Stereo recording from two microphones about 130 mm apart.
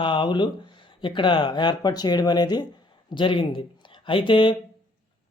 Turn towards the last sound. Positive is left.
turn(degrees=40)  # may be behind; listen again after turning